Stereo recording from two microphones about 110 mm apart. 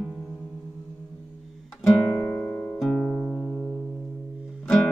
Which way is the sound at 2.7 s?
Centre (ahead or behind).